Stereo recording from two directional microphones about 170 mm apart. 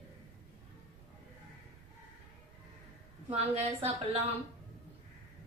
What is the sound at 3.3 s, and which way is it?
Speech, 40° right (ahead or behind).